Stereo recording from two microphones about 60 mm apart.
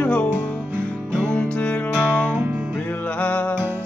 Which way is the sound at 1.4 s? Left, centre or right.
Centre.